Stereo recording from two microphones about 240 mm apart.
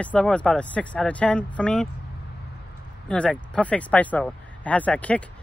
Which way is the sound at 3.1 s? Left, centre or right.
Centre.